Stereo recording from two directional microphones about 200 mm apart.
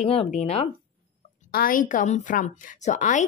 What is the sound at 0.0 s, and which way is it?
Speech, 30° left (ahead or behind).